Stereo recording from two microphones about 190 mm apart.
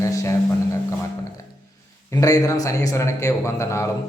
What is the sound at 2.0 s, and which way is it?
Speech, 15° left (ahead or behind).